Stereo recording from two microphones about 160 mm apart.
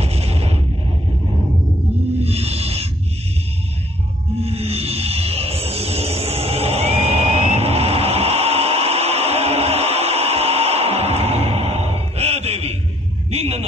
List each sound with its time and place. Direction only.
0.0 s music: 40° right (ahead or behind)
2.1 s snake: 40° right (ahead or behind)
4.4 s music: 40° right (ahead or behind)
13.3 s hum: 40° right (ahead or behind)